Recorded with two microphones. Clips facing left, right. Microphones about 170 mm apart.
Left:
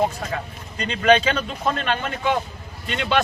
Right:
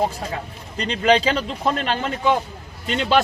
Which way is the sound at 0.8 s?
30° right (ahead or behind).